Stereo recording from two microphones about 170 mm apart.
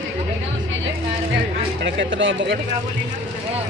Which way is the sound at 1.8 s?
90° right.